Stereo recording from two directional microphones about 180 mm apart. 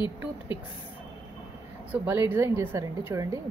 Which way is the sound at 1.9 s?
10° right (ahead or behind).